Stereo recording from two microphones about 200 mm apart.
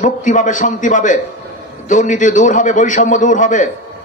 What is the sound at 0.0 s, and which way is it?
Speech, 40° left (ahead or behind).